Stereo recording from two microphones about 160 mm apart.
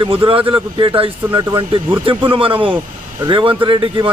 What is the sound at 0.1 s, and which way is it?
A man's voice, 35° right (ahead or behind).